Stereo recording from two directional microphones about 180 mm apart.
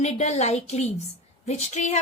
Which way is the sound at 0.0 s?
40° left (ahead or behind).